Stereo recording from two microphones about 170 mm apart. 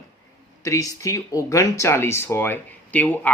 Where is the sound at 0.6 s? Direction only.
20° left (ahead or behind).